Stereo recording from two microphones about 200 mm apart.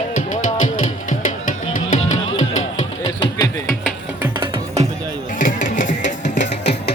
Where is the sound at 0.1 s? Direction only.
40° left (ahead or behind).